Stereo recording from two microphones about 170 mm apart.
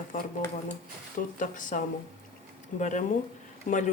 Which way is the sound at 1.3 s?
50° left (ahead or behind).